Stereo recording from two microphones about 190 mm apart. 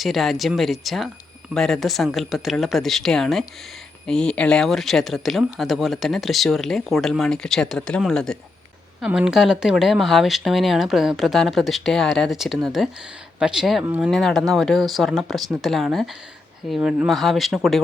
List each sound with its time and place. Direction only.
0.0 s speech: centre (ahead or behind)
14.1 s speech: centre (ahead or behind)